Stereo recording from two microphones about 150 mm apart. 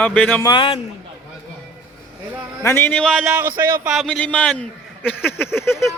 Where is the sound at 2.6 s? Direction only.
15° left (ahead or behind); by 3.9 s 15° right (ahead or behind).